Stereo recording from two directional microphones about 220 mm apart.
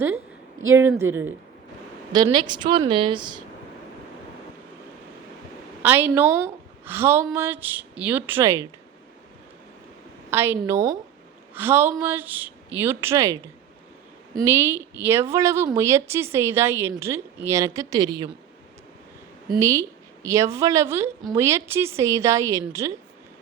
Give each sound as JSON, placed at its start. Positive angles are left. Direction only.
{"t": 0.7, "sound": "a woman's voice", "side_deg": -10}
{"t": 5.8, "sound": "a woman's voice", "side_deg": -10}
{"t": 10.2, "sound": "a woman's voice", "side_deg": -10}
{"t": 19.5, "sound": "a woman's voice", "side_deg": -15}